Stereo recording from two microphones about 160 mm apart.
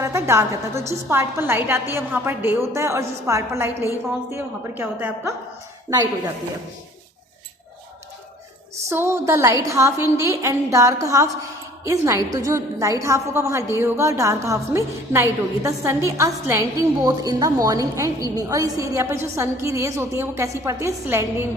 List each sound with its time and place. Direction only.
0.0 s a woman's voice: 15° right (ahead or behind)
8.9 s a woman's voice: 15° right (ahead or behind)